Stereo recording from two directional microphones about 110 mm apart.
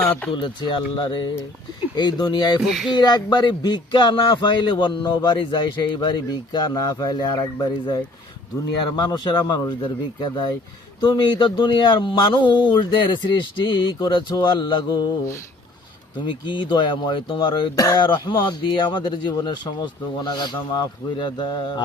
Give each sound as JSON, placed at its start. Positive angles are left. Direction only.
{"t": 0.3, "sound": "speech", "side_deg": 50}
{"t": 2.6, "sound": "speech", "side_deg": 0}
{"t": 2.9, "sound": "speech", "side_deg": 40}
{"t": 16.5, "sound": "speech", "side_deg": 45}
{"t": 18.0, "sound": "speech", "side_deg": 50}